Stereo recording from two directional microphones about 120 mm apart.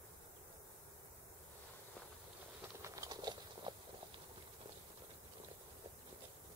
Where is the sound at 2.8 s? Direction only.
30° right (ahead or behind).